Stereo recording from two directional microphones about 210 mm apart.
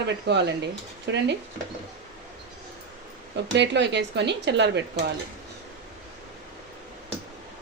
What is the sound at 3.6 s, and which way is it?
Speech, 55° right (ahead or behind).